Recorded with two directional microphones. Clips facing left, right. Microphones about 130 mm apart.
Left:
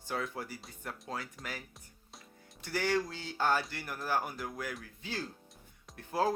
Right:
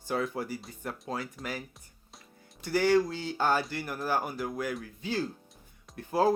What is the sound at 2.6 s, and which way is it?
Speech, 10° right (ahead or behind).